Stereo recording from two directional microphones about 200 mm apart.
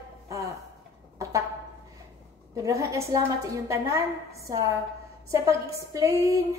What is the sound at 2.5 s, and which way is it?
A woman's voice, 15° right (ahead or behind).